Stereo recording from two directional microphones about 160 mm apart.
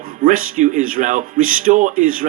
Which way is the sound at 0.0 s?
55° right (ahead or behind).